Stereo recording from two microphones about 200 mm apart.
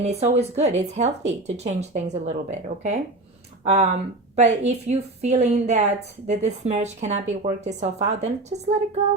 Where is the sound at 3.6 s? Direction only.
35° right (ahead or behind).